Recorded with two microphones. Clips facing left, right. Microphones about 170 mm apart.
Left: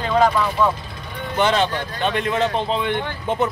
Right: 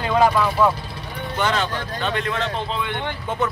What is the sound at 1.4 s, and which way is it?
Speech, 20° left (ahead or behind).